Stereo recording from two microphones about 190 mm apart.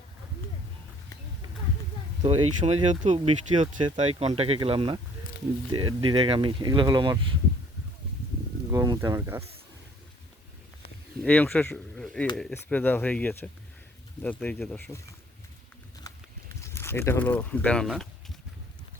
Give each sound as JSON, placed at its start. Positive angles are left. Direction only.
{"t": 2.6, "sound": "speech", "side_deg": -40}
{"t": 3.5, "sound": "speech", "side_deg": -25}
{"t": 8.7, "sound": "speech", "side_deg": -20}
{"t": 11.2, "sound": "speech", "side_deg": 10}
{"t": 16.0, "sound": "a sound", "side_deg": 15}